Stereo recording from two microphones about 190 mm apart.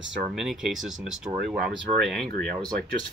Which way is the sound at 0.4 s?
Centre (ahead or behind).